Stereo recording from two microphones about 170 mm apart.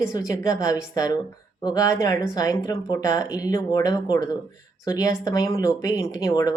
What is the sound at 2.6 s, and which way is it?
Speech, 35° left (ahead or behind).